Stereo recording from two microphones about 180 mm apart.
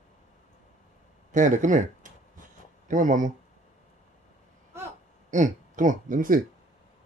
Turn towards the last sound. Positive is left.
turn(degrees=-50)  # may be behind; listen again after turning